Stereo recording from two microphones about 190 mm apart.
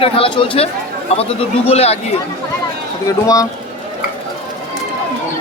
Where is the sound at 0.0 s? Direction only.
30° left (ahead or behind).